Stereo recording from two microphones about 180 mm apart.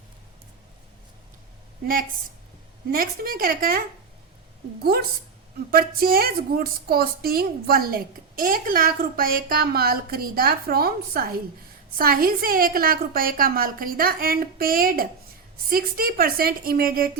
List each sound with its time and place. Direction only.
2.9 s a woman's voice: 55° right (ahead or behind)